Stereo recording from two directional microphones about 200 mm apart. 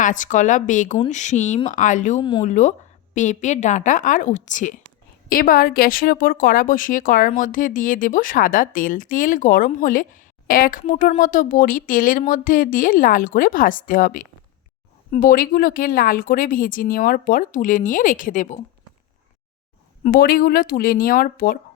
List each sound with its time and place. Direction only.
0.0 s a woman's voice: 40° left (ahead or behind)
20.1 s a woman's voice: 45° left (ahead or behind)